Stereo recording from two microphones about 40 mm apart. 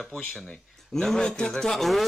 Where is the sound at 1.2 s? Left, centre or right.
Left.